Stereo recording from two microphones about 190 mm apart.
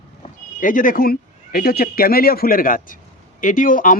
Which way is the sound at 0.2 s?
45° left (ahead or behind).